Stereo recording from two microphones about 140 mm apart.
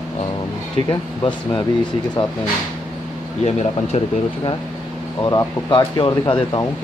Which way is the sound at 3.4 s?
50° left (ahead or behind).